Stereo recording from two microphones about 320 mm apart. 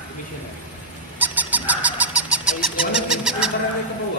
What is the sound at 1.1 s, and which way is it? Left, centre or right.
Owl, centre.